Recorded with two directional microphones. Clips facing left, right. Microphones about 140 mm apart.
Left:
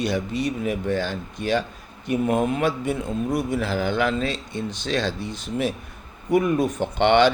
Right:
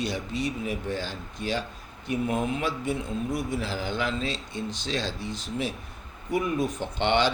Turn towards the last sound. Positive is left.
turn(degrees=60)  # may be behind; listen again after turning